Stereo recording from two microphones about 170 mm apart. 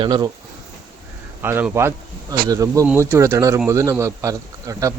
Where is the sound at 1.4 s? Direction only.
10° right (ahead or behind).